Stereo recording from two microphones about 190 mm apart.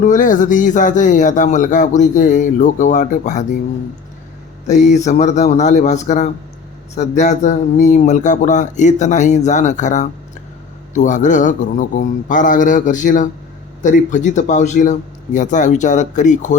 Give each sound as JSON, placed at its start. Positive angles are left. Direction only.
{"t": 0.0, "sound": "a man's voice", "side_deg": 45}
{"t": 4.6, "sound": "a man's voice", "side_deg": 40}